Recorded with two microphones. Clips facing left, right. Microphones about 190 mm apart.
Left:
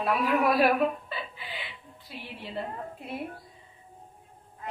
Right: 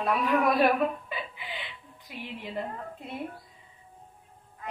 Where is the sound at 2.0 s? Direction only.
15° right (ahead or behind).